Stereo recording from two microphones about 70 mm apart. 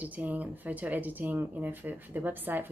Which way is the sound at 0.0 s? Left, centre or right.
Right.